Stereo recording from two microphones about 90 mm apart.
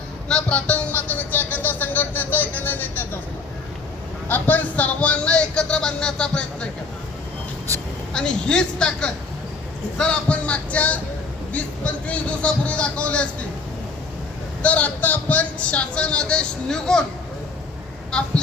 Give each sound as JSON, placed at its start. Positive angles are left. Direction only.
{"t": 0.3, "sound": "speech", "side_deg": 10}
{"t": 4.3, "sound": "speech", "side_deg": 20}
{"t": 8.1, "sound": "speech", "side_deg": 10}
{"t": 14.6, "sound": "speech", "side_deg": 15}
{"t": 18.1, "sound": "speech", "side_deg": 10}